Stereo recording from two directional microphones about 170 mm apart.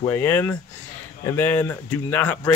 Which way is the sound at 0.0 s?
15° left (ahead or behind).